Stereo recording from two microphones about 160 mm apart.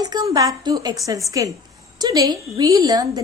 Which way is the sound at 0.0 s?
25° right (ahead or behind).